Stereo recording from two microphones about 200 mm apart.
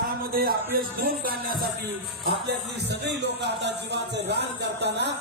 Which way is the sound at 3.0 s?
55° right (ahead or behind).